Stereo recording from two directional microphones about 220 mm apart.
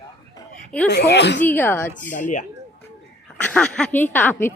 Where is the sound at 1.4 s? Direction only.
10° left (ahead or behind).